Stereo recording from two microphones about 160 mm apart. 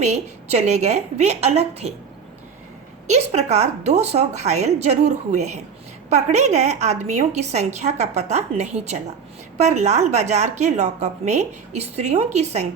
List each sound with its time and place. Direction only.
0.0 s a woman's voice: 40° right (ahead or behind)
3.1 s a woman's voice: 45° right (ahead or behind)